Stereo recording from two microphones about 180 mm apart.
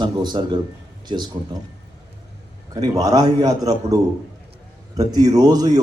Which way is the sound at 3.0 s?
20° right (ahead or behind).